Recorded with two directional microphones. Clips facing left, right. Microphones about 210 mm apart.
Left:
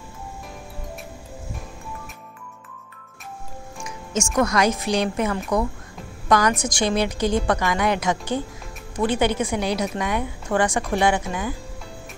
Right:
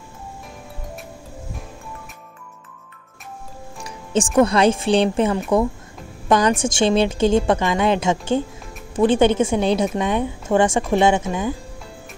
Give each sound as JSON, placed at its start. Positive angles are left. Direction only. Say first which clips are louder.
{"t": 3.8, "sound": "a woman's voice", "louder": "right 5 dB", "side_deg": -30}